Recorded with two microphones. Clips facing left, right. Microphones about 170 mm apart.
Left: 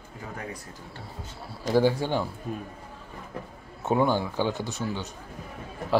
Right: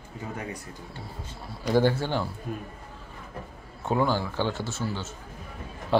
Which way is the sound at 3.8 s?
20° left (ahead or behind).